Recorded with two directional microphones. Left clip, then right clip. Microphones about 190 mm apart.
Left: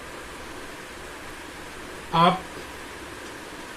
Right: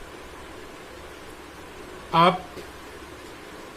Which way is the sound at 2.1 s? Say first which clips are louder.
Right 1 dB; 25° right (ahead or behind).